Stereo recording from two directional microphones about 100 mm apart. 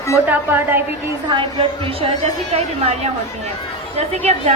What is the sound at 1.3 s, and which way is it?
A woman's voice, 60° right (ahead or behind).